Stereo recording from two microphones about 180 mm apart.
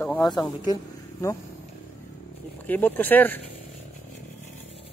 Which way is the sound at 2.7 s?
10° left (ahead or behind).